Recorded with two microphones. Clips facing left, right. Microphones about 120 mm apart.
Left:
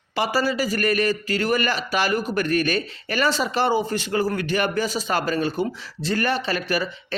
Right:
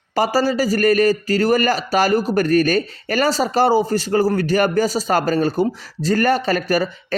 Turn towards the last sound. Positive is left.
turn(degrees=-40)  # may be behind; listen again after turning